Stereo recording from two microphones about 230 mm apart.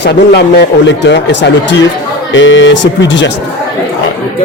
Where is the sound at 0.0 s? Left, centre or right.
Left.